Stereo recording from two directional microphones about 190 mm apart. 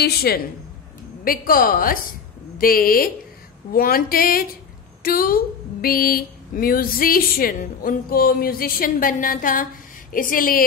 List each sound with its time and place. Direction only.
0.0 s speech: 55° left (ahead or behind)